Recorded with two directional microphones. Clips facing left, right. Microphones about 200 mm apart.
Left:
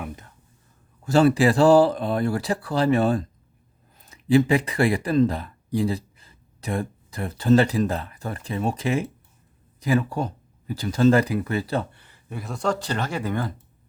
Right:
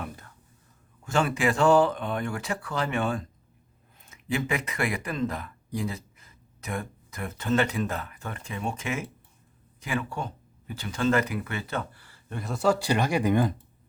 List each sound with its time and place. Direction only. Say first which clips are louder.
1.0 s speech: left 8 dB; 35° left (ahead or behind)
12.3 s speech: right 1 dB; centre (ahead or behind); by 13.5 s 15° right (ahead or behind)